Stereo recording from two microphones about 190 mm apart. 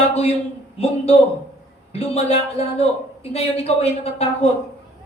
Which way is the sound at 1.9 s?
30° left (ahead or behind).